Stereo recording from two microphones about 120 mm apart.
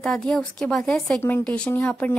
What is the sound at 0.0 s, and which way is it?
Speech, 5° left (ahead or behind).